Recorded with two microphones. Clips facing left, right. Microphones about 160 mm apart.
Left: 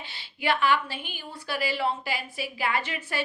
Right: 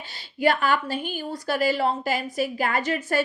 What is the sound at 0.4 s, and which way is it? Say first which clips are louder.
A woman's voice: right 3 dB; 45° right (ahead or behind).